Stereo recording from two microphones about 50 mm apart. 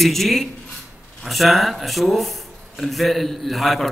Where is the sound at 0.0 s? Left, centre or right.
Centre.